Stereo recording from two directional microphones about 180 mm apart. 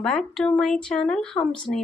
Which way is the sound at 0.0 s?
Centre (ahead or behind).